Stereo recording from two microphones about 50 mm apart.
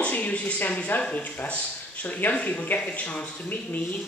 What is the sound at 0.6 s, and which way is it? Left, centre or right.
Speech, left.